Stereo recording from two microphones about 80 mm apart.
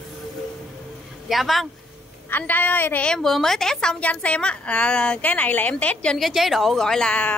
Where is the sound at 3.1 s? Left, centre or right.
Centre.